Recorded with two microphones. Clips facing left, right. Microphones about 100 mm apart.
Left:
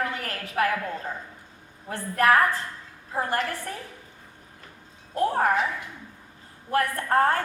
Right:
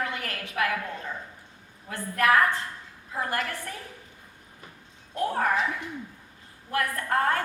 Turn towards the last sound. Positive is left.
turn(degrees=30)  # may be behind; listen again after turning